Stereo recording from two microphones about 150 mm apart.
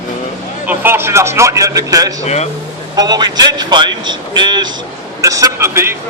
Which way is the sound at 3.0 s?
25° right (ahead or behind).